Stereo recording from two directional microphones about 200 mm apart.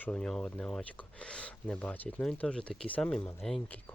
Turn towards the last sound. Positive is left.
turn(degrees=5)  # may be behind; listen again after turning